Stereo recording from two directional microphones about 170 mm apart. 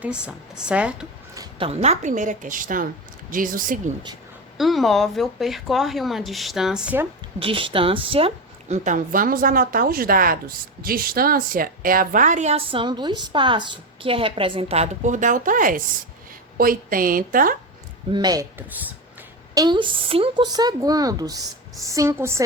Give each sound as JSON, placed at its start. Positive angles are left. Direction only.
{"t": 0.0, "sound": "speech", "side_deg": -5}
{"t": 1.5, "sound": "speech", "side_deg": -35}
{"t": 4.5, "sound": "speech", "side_deg": 0}
{"t": 7.3, "sound": "a woman's voice", "side_deg": -30}
{"t": 8.7, "sound": "a woman's voice", "side_deg": -50}
{"t": 18.1, "sound": "a woman's voice", "side_deg": -25}